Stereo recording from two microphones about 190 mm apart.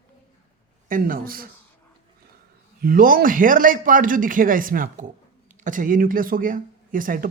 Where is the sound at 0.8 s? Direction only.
45° right (ahead or behind).